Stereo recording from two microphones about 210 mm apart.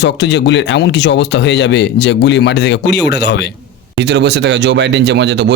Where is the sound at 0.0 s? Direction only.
55° left (ahead or behind).